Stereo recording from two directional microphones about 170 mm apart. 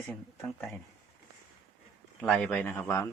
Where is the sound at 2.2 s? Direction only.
5° left (ahead or behind).